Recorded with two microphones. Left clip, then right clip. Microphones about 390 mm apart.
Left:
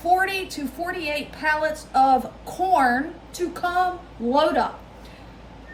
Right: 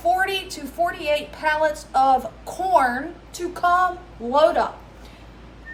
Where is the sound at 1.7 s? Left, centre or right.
Centre.